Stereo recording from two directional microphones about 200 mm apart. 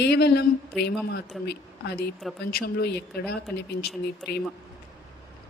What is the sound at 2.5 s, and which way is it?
Speech, 50° left (ahead or behind).